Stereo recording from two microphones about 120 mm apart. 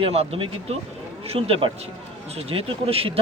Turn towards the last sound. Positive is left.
turn(degrees=-55)  # may be behind; listen again after turning